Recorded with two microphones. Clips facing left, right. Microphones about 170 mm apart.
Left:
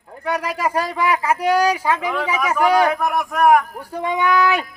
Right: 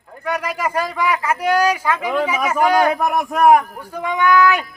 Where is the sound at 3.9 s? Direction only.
30° left (ahead or behind).